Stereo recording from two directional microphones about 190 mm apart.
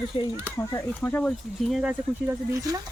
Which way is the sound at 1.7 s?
5° right (ahead or behind).